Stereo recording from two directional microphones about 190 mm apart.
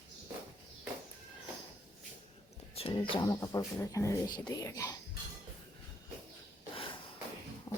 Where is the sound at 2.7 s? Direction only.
30° left (ahead or behind).